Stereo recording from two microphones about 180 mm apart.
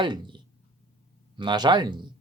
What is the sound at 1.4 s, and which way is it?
Speech, 25° right (ahead or behind).